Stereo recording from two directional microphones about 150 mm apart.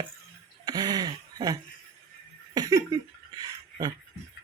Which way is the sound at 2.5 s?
25° right (ahead or behind).